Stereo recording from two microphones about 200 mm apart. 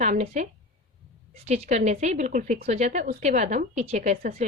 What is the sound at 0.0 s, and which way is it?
Speech, 35° right (ahead or behind).